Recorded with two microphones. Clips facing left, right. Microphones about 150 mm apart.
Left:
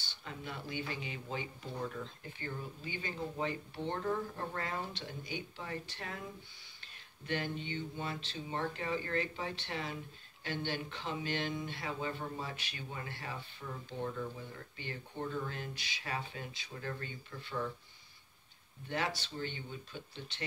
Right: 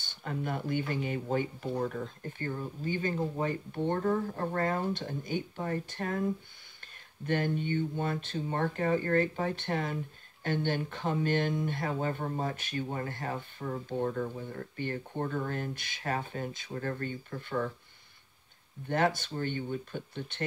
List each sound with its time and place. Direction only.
0.0 s speech: 50° right (ahead or behind)
18.9 s speech: 50° right (ahead or behind)